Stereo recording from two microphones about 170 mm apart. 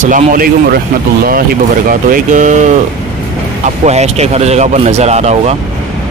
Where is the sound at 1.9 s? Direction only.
55° right (ahead or behind).